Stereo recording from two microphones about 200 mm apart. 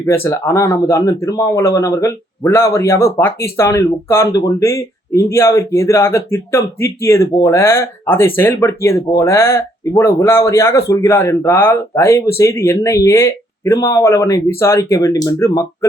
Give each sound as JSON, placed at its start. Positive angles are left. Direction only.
{"t": 0.0, "sound": "speech", "side_deg": 15}